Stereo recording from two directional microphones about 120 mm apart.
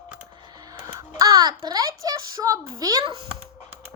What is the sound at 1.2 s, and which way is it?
A woman's voice, 35° right (ahead or behind).